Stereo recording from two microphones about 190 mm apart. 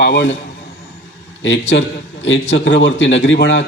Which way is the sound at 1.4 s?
70° left (ahead or behind).